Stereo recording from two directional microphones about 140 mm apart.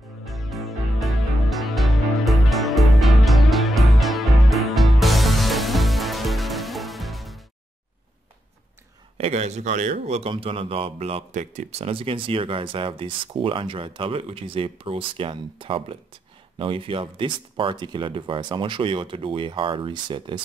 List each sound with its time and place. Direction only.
0.2 s music: centre (ahead or behind)
9.2 s speech: 50° right (ahead or behind)
10.3 s speech: 40° right (ahead or behind)
11.9 s speech: 40° right (ahead or behind)